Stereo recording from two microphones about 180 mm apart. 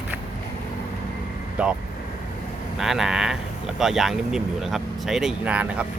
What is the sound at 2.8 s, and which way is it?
Speech, centre (ahead or behind).